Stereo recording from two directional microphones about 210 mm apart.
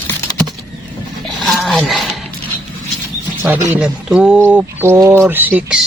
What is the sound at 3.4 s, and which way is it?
Speech, 10° right (ahead or behind).